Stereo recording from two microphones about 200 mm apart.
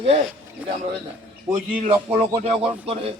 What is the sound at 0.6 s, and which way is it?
Speech, 5° right (ahead or behind).